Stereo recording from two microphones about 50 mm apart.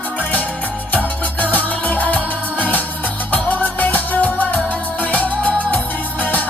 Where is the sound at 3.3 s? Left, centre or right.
Left.